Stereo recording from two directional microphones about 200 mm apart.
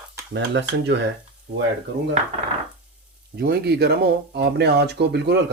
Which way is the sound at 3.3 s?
50° right (ahead or behind).